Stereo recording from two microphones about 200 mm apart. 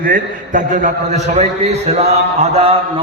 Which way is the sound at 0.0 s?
40° right (ahead or behind).